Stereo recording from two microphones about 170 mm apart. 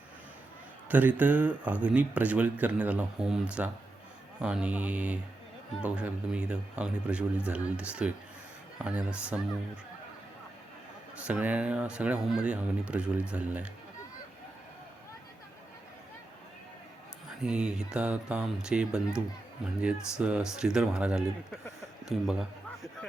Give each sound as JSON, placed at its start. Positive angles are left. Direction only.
{"t": 0.9, "sound": "speech", "side_deg": -10}
{"t": 11.2, "sound": "speech", "side_deg": -10}
{"t": 17.4, "sound": "speech", "side_deg": -5}
{"t": 22.0, "sound": "a sound", "side_deg": -5}